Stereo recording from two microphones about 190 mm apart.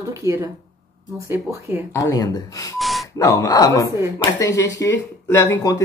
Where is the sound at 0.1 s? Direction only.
15° right (ahead or behind).